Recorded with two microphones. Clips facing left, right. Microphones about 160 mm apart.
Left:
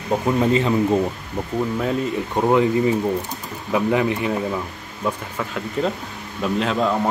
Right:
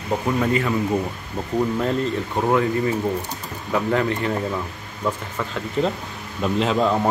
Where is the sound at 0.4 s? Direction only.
25° left (ahead or behind).